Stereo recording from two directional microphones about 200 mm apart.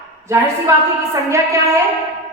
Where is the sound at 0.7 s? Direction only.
15° right (ahead or behind).